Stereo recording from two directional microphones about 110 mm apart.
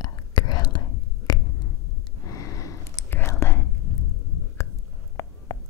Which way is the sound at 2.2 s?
35° left (ahead or behind).